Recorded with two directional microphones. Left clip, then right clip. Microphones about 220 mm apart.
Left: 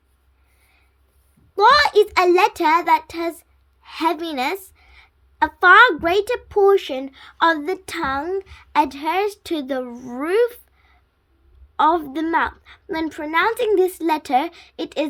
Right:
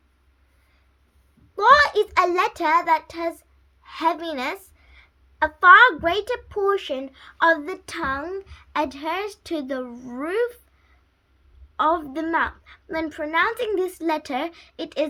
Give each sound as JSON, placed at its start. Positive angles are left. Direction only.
{"t": 1.5, "sound": "a child's voice", "side_deg": 40}